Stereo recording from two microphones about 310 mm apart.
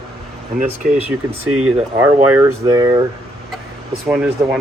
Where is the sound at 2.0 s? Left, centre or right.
Centre.